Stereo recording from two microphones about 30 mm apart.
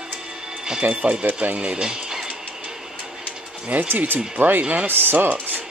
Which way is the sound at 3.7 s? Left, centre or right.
Right.